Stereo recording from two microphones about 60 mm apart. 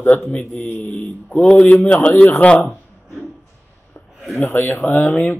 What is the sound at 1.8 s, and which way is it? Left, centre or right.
Speech, centre.